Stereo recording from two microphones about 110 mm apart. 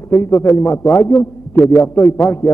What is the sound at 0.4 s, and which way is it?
A man's voice, 30° left (ahead or behind).